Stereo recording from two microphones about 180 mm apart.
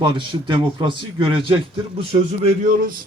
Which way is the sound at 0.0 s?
25° right (ahead or behind).